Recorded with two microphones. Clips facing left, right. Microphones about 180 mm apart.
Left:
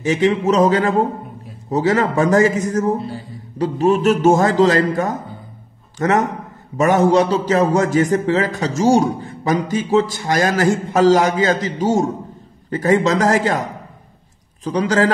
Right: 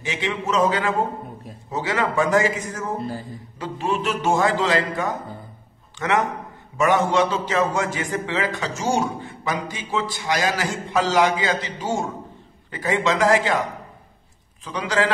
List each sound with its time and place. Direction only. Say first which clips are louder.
0.0 s a man's voice: left 11 dB; 40° left (ahead or behind)
14.6 s a man's voice: left 6 dB; 40° left (ahead or behind)